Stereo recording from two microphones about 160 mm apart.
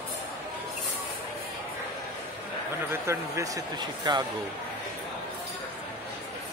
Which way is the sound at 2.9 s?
15° right (ahead or behind).